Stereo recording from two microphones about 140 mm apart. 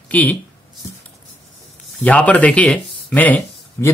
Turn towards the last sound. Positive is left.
turn(degrees=10)  # may be behind; listen again after turning